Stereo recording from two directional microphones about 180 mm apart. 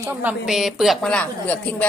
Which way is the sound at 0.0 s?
10° right (ahead or behind).